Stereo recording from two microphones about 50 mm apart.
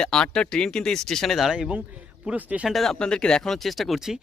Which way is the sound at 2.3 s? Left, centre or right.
Right.